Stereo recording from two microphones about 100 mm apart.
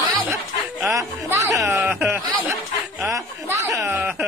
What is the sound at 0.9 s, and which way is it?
Music, 35° right (ahead or behind).